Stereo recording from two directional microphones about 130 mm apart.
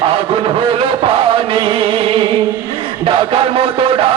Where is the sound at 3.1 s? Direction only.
45° right (ahead or behind).